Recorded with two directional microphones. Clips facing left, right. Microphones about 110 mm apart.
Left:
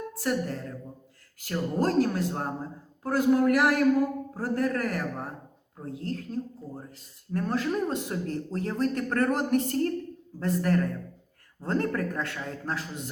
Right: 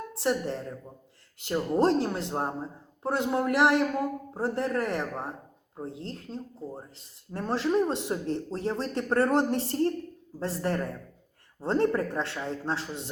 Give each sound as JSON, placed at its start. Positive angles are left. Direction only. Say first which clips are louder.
{"t": 0.2, "sound": "speech", "louder": "right 1 dB", "side_deg": -25}